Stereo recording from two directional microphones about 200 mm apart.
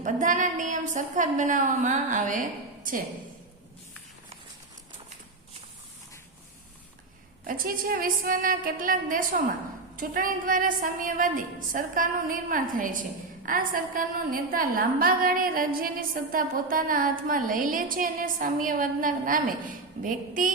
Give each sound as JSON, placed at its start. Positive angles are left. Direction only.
{"t": 0.0, "sound": "a woman's voice", "side_deg": -40}
{"t": 7.4, "sound": "a woman's voice", "side_deg": -45}